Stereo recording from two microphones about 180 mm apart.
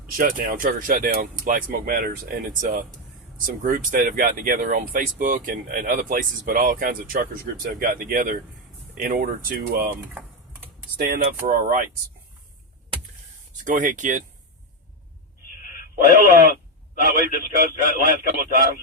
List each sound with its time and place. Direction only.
0.2 s speech: 50° right (ahead or behind)
10.9 s speech: 50° right (ahead or behind)
13.6 s speech: 45° right (ahead or behind)
16.1 s speech: 50° right (ahead or behind)